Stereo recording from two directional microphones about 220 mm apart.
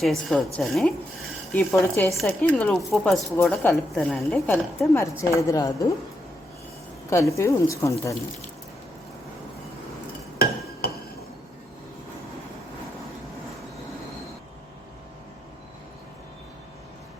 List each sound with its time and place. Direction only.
0.0 s a woman's voice: centre (ahead or behind)
7.1 s a woman's voice: 15° left (ahead or behind)
10.3 s a sound: 45° left (ahead or behind)